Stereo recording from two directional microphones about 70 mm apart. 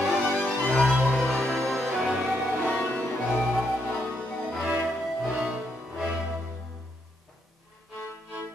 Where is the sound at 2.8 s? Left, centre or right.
Centre.